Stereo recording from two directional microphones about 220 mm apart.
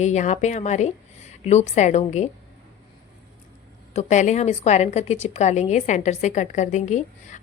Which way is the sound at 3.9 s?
30° left (ahead or behind).